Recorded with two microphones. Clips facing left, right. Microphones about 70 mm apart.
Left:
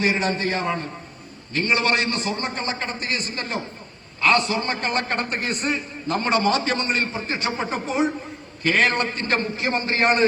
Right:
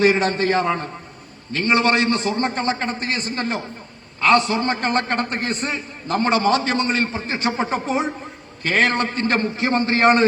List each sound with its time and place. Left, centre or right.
0.0 s a man's voice: right
1.6 s a man's voice: right